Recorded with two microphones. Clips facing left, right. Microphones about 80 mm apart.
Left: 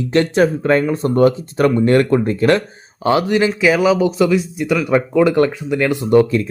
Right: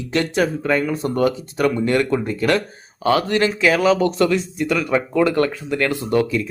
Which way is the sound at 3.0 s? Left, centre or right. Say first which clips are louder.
Left 2 dB; centre.